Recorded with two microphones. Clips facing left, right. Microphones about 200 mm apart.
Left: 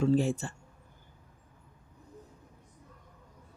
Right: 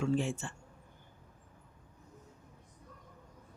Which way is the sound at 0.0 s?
35° left (ahead or behind).